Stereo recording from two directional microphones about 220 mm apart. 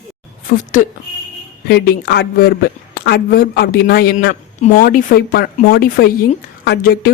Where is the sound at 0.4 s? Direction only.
35° left (ahead or behind).